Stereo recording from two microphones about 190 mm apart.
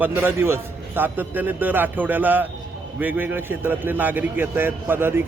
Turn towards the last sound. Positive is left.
turn(degrees=-10)  # may be behind; listen again after turning